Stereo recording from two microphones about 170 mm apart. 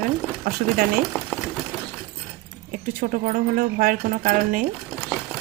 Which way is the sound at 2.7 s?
55° right (ahead or behind).